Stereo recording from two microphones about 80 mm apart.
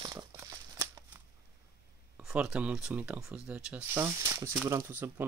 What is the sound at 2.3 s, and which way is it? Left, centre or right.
Speech, centre.